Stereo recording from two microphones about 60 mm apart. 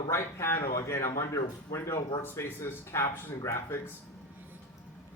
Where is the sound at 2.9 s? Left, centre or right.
Left.